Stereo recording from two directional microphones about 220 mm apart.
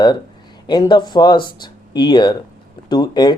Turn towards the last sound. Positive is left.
turn(degrees=20)  # may be behind; listen again after turning